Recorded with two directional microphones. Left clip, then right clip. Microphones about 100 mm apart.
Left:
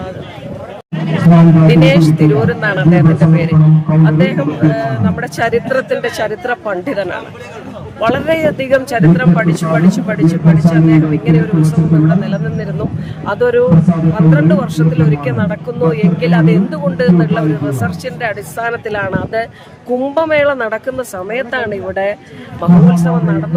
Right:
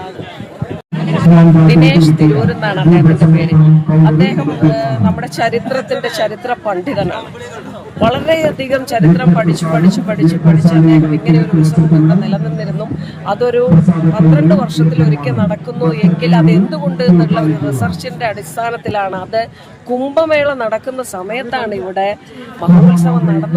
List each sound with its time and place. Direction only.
1.6 s a man's voice: 30° left (ahead or behind)